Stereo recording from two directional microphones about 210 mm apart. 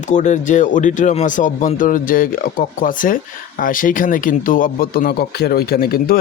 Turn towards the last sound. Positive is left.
turn(degrees=45)  # may be behind; listen again after turning